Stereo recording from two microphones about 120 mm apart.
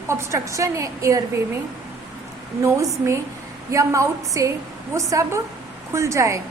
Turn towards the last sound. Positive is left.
turn(degrees=-25)  # may be behind; listen again after turning